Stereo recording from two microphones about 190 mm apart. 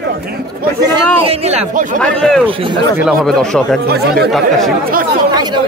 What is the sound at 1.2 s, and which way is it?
Speech, 30° right (ahead or behind).